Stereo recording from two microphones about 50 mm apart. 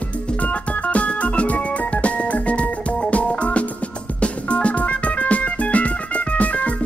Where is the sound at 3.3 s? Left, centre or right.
Left.